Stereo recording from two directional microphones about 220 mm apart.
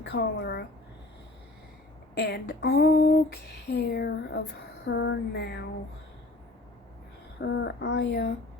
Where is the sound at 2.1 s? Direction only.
45° left (ahead or behind).